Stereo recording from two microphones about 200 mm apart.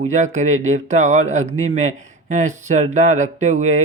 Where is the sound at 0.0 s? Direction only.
35° right (ahead or behind).